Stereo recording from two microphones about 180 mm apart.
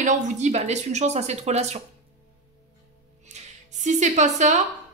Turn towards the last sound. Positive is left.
turn(degrees=-40)  # may be behind; listen again after turning